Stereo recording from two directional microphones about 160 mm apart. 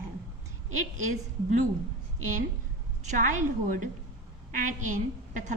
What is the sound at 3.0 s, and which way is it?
A woman's voice, 55° right (ahead or behind).